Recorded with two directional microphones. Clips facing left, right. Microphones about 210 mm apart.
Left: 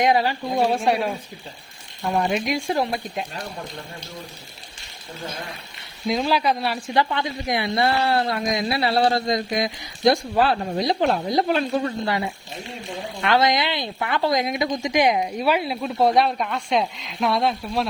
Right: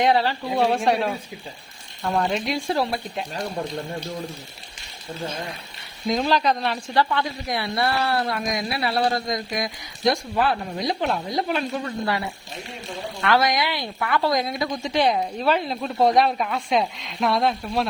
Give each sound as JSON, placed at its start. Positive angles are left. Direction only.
{"t": 0.0, "sound": "a woman's voice", "side_deg": 15}
{"t": 6.1, "sound": "a woman's voice", "side_deg": 5}
{"t": 6.9, "sound": "a woman's voice", "side_deg": 20}
{"t": 12.0, "sound": "a woman's voice", "side_deg": 20}